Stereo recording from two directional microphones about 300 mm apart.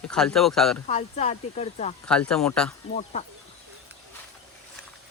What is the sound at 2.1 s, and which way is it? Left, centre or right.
Speech, centre.